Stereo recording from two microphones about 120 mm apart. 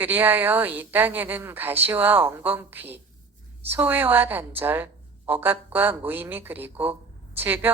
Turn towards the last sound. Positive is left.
turn(degrees=-15)  # may be behind; listen again after turning